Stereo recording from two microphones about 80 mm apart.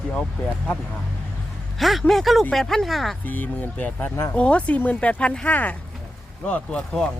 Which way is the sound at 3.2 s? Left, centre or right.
Left.